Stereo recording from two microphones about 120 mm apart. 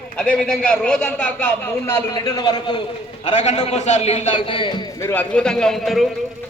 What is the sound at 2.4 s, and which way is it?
Speech, 35° left (ahead or behind).